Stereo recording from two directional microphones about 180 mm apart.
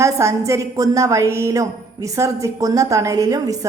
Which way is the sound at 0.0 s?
15° right (ahead or behind).